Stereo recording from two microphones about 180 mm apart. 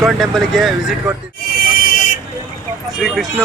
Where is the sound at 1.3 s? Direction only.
60° left (ahead or behind).